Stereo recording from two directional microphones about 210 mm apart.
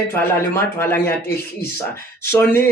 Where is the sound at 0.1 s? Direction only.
10° left (ahead or behind).